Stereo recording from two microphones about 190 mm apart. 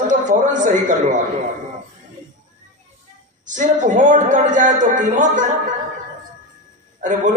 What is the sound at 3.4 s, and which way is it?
A man's voice, 40° right (ahead or behind).